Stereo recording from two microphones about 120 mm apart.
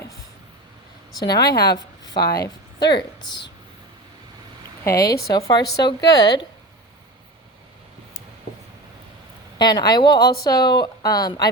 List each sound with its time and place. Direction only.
1.5 s a woman's voice: 30° left (ahead or behind)
4.8 s a woman's voice: 25° left (ahead or behind)
9.6 s a woman's voice: 35° left (ahead or behind)